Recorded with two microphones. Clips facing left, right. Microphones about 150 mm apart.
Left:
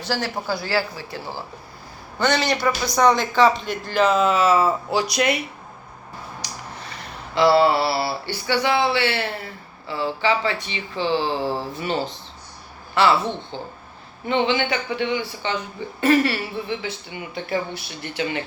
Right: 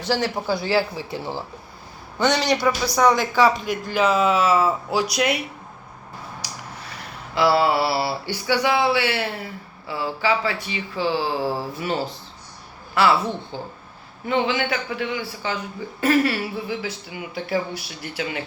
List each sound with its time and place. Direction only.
0.0 s speech: 20° right (ahead or behind)
6.4 s a sound: 10° right (ahead or behind)
12.9 s speech: 5° right (ahead or behind)
14.3 s speech: 5° right (ahead or behind)